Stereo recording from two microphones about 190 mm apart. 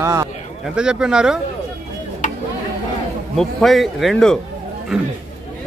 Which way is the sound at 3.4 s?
Centre (ahead or behind).